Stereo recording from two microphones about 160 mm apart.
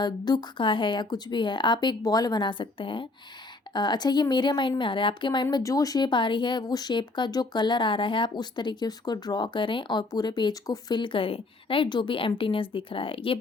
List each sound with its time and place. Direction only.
0.0 s a woman's voice: 25° left (ahead or behind)